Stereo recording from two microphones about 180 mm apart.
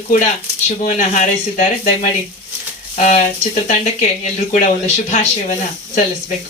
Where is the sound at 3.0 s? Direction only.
40° left (ahead or behind).